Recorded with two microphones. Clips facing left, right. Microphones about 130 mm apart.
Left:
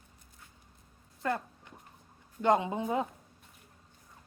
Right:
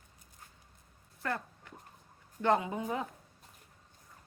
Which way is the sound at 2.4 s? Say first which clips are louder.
Left 2 dB; 20° left (ahead or behind).